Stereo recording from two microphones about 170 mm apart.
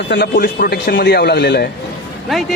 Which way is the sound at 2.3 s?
Centre (ahead or behind).